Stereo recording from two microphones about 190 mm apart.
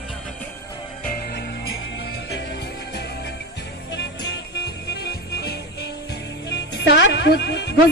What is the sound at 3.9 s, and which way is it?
Music, 65° left (ahead or behind).